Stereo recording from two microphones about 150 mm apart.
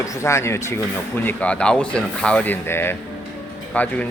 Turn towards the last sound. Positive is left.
turn(degrees=10)  # may be behind; listen again after turning